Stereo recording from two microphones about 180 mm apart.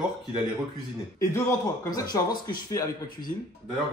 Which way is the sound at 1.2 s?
15° left (ahead or behind).